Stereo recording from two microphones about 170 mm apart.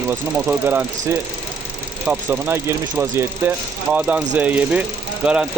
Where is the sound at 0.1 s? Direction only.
10° right (ahead or behind).